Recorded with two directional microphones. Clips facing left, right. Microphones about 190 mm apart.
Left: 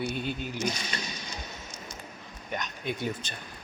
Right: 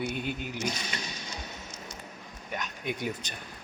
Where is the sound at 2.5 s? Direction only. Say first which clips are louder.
Left 1 dB; 5° right (ahead or behind).